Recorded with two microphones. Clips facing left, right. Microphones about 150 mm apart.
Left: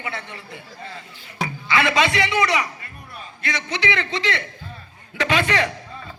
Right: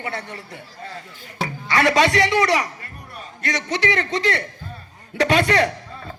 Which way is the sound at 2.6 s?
40° right (ahead or behind).